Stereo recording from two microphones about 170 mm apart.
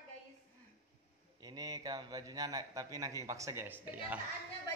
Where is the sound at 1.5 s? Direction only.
20° right (ahead or behind).